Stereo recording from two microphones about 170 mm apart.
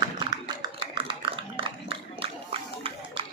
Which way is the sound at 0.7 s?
30° right (ahead or behind).